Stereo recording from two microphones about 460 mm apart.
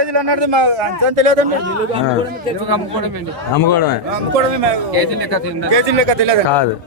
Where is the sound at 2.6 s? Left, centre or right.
Right.